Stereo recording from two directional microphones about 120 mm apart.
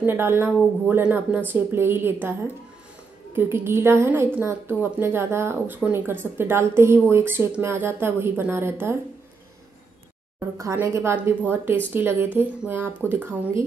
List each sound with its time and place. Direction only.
0.0 s a woman's voice: 20° right (ahead or behind)
3.3 s a woman's voice: 20° right (ahead or behind)
10.6 s a woman's voice: 25° right (ahead or behind)